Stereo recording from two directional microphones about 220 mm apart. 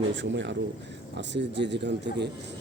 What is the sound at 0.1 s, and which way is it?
A man's voice, 55° right (ahead or behind).